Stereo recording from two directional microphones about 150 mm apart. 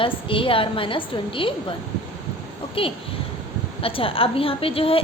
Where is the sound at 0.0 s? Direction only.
35° left (ahead or behind).